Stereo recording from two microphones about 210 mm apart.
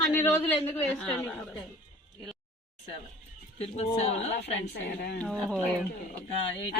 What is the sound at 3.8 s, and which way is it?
Speech, 30° left (ahead or behind).